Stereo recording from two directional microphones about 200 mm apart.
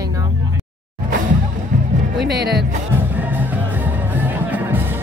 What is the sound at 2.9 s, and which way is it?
Music, 10° right (ahead or behind).